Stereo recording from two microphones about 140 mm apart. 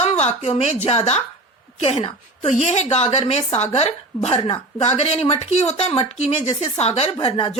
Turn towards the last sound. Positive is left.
turn(degrees=40)  # may be behind; listen again after turning